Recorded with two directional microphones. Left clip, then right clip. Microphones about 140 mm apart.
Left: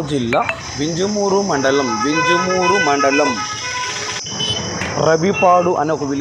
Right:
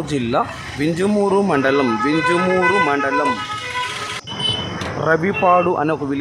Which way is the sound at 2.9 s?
15° left (ahead or behind).